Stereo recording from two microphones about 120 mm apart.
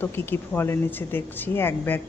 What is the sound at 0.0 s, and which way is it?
Speech, 15° left (ahead or behind).